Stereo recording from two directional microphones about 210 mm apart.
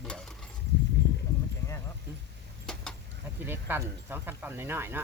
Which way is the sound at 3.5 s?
10° right (ahead or behind).